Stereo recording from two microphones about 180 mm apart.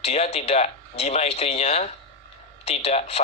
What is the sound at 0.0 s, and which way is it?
Speech, 35° left (ahead or behind).